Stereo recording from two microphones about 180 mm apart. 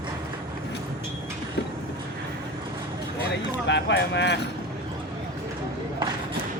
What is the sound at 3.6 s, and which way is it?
Speech, 75° left (ahead or behind).